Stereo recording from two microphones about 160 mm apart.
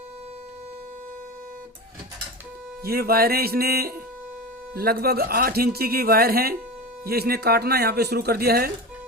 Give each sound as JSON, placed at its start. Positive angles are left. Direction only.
{"t": 2.8, "sound": "speech", "side_deg": -70}